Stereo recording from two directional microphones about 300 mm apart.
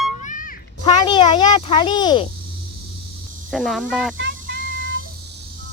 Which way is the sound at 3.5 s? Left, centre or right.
Centre.